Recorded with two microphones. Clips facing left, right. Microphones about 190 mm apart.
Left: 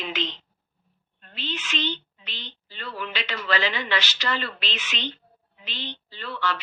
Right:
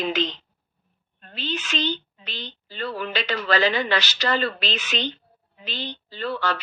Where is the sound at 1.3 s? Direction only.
40° right (ahead or behind).